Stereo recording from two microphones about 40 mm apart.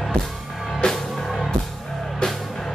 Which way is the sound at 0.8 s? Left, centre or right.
Left.